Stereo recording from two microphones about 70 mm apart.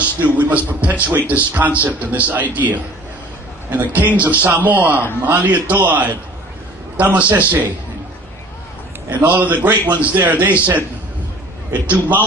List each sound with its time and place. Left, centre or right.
0.2 s a man's voice: right
9.0 s a man's voice: right